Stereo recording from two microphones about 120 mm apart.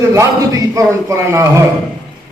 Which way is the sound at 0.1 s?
25° right (ahead or behind).